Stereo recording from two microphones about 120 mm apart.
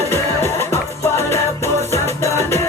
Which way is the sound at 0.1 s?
20° left (ahead or behind).